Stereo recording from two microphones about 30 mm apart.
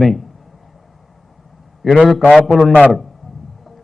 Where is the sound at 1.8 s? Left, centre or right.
Centre.